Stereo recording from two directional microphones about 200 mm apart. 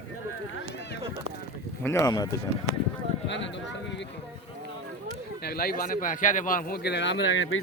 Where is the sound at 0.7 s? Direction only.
60° left (ahead or behind).